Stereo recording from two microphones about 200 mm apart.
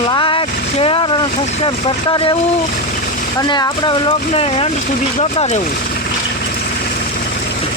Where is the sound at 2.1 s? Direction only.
25° left (ahead or behind).